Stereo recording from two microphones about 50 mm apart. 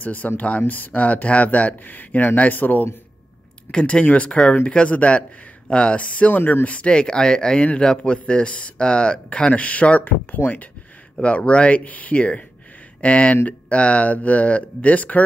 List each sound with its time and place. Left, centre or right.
0.0 s speech: left
2.0 s speech: left
3.7 s speech: left
6.3 s speech: left
11.1 s speech: left